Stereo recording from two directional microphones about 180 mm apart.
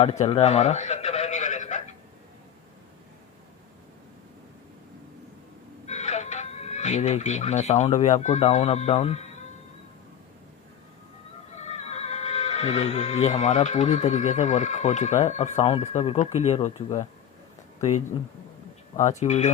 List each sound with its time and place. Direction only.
0.0 s a sound: 35° left (ahead or behind)
5.8 s speech: 40° left (ahead or behind)
11.5 s speech: 40° left (ahead or behind)
18.9 s speech: 40° left (ahead or behind)